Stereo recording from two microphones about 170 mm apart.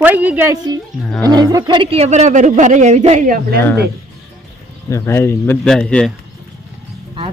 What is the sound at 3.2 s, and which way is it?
Speech, 55° right (ahead or behind).